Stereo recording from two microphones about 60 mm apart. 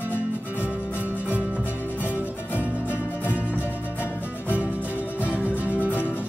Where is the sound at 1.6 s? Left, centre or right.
Left.